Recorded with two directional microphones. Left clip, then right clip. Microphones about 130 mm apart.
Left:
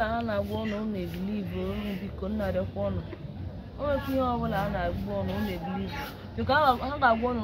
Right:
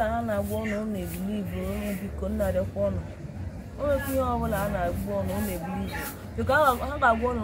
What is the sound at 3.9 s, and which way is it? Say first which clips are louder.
Speech: right 2 dB; 15° left (ahead or behind).